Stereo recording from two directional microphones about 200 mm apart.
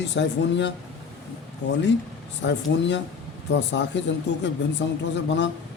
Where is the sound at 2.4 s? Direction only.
60° left (ahead or behind).